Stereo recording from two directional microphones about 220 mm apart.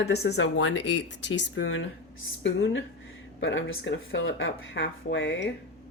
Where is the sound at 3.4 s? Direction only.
55° left (ahead or behind).